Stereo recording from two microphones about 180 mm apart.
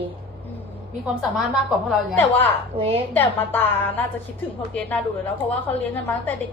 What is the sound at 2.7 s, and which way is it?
Speech, 30° right (ahead or behind).